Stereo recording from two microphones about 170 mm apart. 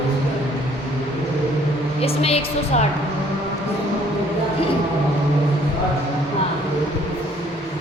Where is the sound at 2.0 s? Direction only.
35° left (ahead or behind).